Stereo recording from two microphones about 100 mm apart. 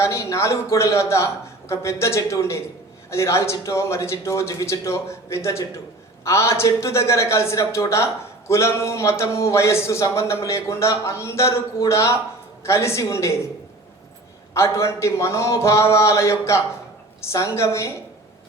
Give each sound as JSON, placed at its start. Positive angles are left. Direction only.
{"t": 0.0, "sound": "a woman's voice", "side_deg": 30}
{"t": 14.5, "sound": "a woman's voice", "side_deg": 30}